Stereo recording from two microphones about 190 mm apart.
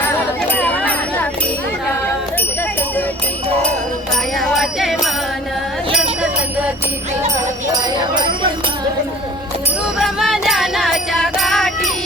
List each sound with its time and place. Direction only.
0.5 s jingle bell: 5° left (ahead or behind)
4.4 s music: centre (ahead or behind)
10.0 s music: centre (ahead or behind)